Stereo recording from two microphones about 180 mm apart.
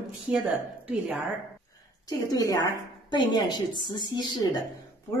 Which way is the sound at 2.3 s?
20° left (ahead or behind).